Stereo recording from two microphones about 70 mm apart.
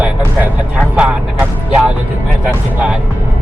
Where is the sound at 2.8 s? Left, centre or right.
Centre.